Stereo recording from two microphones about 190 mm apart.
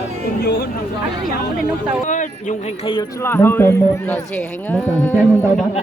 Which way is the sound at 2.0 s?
40° left (ahead or behind).